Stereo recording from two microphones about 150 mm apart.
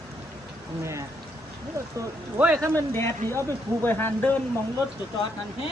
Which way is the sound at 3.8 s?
15° left (ahead or behind).